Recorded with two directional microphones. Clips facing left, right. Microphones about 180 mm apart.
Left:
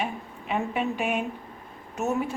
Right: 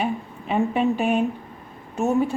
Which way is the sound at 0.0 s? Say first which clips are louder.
Right 6 dB; 35° right (ahead or behind).